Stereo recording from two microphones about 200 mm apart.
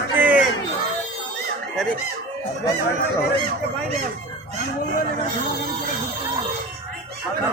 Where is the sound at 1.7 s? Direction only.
Centre (ahead or behind).